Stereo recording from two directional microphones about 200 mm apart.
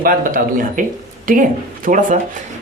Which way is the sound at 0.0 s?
45° right (ahead or behind).